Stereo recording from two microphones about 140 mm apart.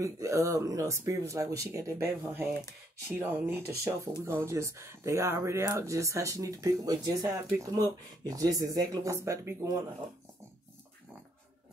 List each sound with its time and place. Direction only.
0.0 s speech: 20° right (ahead or behind)